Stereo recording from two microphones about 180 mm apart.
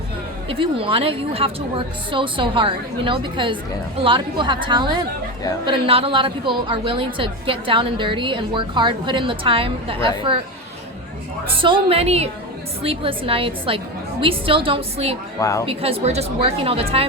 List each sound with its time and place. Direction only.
0.4 s a woman's voice: 30° right (ahead or behind)
11.6 s a woman's voice: 30° right (ahead or behind)
15.4 s speech: 15° left (ahead or behind)
15.6 s a woman's voice: 30° right (ahead or behind)